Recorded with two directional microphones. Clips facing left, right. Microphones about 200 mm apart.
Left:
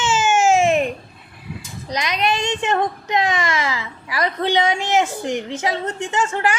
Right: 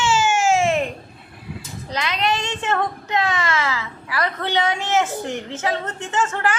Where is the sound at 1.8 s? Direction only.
15° left (ahead or behind).